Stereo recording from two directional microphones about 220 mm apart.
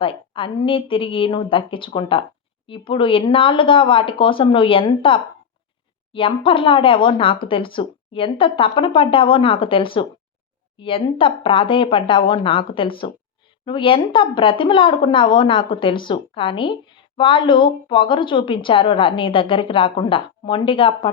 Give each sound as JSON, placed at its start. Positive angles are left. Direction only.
{"t": 0.0, "sound": "speech", "side_deg": 25}